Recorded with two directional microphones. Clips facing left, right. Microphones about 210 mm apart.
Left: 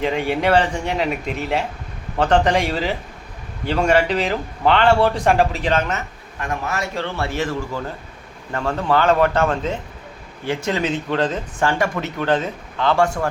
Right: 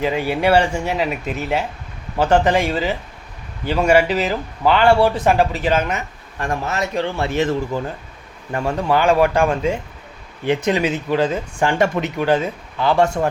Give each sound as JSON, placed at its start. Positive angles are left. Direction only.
{"t": 0.0, "sound": "speech", "side_deg": -5}
{"t": 6.4, "sound": "a man's voice", "side_deg": -30}
{"t": 6.7, "sound": "speech", "side_deg": -20}
{"t": 13.0, "sound": "speech", "side_deg": -20}